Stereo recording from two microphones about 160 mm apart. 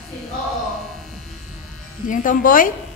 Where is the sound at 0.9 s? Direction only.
Centre (ahead or behind).